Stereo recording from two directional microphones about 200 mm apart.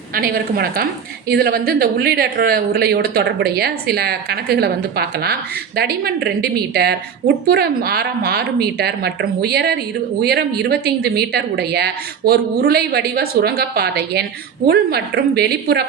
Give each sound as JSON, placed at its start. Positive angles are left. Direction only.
{"t": 0.1, "sound": "speech", "side_deg": -50}